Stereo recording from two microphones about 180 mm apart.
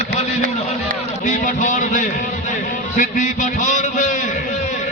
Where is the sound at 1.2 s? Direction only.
45° left (ahead or behind).